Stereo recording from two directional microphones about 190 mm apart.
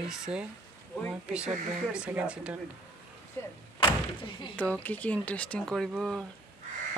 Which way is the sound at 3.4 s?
10° left (ahead or behind).